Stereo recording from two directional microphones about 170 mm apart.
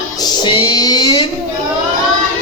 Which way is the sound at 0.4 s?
25° left (ahead or behind).